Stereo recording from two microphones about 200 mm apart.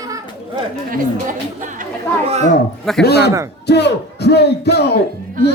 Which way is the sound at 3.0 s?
55° left (ahead or behind).